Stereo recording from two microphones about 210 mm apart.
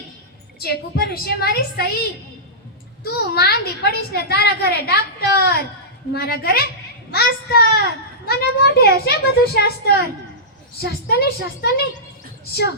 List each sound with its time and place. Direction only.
0.6 s a woman's voice: 45° left (ahead or behind)
3.0 s a woman's voice: 50° left (ahead or behind)